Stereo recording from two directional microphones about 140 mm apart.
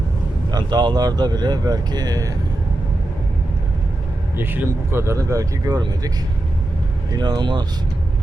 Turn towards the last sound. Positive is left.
turn(degrees=-30)  # may be behind; listen again after turning